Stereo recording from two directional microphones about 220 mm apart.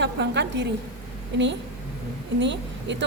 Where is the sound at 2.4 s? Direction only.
55° right (ahead or behind).